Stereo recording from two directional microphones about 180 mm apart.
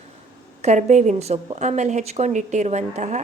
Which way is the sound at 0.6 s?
40° right (ahead or behind).